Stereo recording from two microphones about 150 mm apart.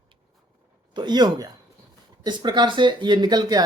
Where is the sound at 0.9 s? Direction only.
30° right (ahead or behind).